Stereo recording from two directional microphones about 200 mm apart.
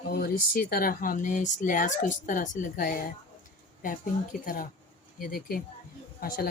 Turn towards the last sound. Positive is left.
turn(degrees=45)  # may be behind; listen again after turning